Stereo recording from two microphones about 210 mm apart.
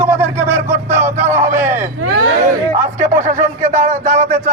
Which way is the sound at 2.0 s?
75° right (ahead or behind).